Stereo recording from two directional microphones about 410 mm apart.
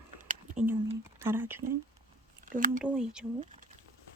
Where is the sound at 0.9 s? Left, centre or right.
Centre.